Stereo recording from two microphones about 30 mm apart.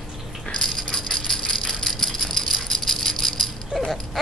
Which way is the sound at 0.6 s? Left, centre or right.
Left.